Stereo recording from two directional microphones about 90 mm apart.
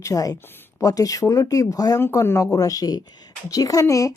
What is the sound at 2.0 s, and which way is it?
A woman's voice, 30° left (ahead or behind).